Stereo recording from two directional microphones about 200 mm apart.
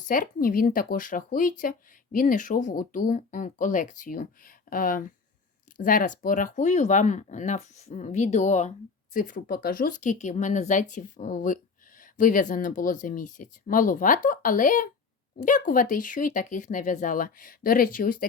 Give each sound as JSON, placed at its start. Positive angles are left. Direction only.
{"t": 0.0, "sound": "speech", "side_deg": 45}